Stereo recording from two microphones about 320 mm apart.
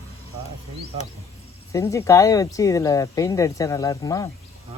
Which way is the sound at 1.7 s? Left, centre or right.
Centre.